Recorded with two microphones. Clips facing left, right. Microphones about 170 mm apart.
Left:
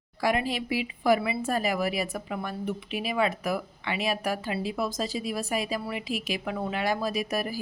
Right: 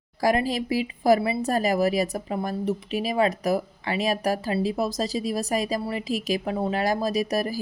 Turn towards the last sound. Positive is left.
turn(degrees=-40)  # may be behind; listen again after turning